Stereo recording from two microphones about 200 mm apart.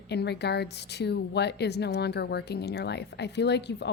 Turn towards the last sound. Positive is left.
turn(degrees=60)  # may be behind; listen again after turning